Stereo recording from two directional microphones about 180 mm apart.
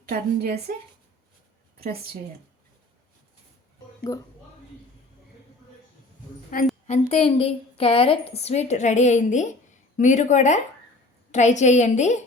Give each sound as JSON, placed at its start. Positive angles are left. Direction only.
{"t": 0.1, "sound": "a woman's voice", "side_deg": -55}
{"t": 4.1, "sound": "speech", "side_deg": 15}
{"t": 6.5, "sound": "a woman's voice", "side_deg": 55}
{"t": 6.8, "sound": "a woman's voice", "side_deg": 40}